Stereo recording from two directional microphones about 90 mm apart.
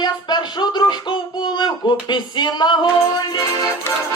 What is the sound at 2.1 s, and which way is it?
Speech, 55° left (ahead or behind).